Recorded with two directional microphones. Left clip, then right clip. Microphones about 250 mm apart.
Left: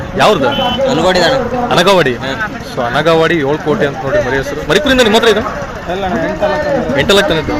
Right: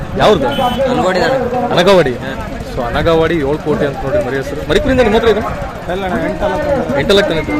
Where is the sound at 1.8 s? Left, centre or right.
Centre.